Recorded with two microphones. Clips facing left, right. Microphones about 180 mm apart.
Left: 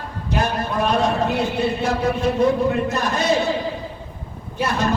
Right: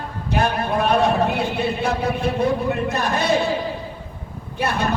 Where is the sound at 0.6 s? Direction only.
55° right (ahead or behind).